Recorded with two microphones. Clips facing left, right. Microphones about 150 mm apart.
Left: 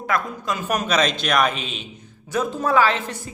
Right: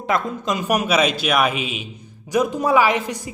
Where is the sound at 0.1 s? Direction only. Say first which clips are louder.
Right 3 dB; 20° right (ahead or behind).